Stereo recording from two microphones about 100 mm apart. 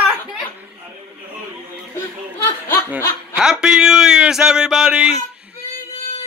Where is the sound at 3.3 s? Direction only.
10° right (ahead or behind).